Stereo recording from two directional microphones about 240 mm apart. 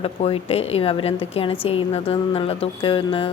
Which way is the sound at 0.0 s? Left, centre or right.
Left.